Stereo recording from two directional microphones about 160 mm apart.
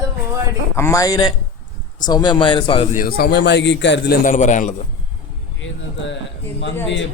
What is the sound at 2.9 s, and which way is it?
A man's voice, 60° left (ahead or behind).